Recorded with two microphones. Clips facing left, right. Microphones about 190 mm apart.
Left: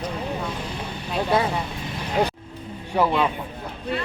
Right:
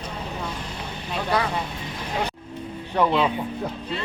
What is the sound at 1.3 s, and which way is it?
Speech, 25° left (ahead or behind).